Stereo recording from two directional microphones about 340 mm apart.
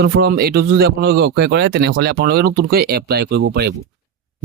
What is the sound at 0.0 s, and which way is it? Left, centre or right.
Speech, right.